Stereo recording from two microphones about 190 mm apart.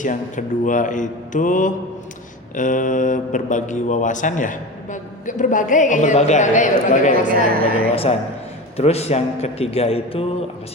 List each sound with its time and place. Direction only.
0.0 s speech: 40° left (ahead or behind)